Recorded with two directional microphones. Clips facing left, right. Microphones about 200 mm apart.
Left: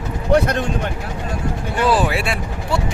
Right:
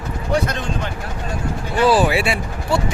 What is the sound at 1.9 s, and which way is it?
Speech, 5° right (ahead or behind).